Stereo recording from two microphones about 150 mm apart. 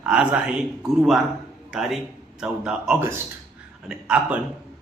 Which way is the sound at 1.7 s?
Centre (ahead or behind).